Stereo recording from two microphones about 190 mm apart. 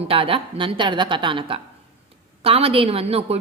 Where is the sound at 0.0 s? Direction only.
30° right (ahead or behind).